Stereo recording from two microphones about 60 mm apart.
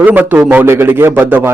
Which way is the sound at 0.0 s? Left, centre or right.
Right.